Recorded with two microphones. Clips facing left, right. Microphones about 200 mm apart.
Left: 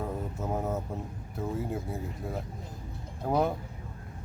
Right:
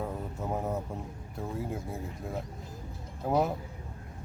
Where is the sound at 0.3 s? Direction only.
Centre (ahead or behind).